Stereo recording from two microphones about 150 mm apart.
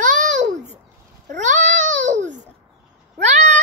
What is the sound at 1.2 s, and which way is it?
Babbling, 55° right (ahead or behind).